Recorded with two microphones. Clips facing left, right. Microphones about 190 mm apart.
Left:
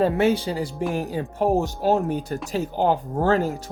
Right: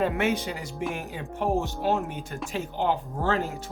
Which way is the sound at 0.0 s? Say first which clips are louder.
Left 6 dB; 35° left (ahead or behind).